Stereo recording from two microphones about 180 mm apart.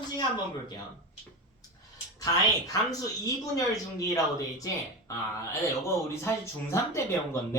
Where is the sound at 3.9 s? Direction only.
20° left (ahead or behind).